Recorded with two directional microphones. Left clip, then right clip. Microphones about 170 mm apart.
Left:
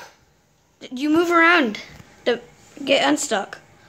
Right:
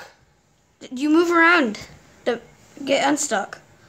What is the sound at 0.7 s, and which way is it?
Speech, 5° right (ahead or behind).